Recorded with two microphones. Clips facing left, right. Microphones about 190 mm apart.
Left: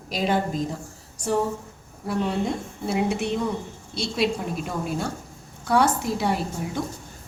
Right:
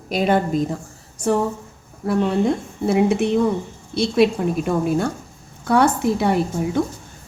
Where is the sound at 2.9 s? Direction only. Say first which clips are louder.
Right 7 dB; 55° right (ahead or behind).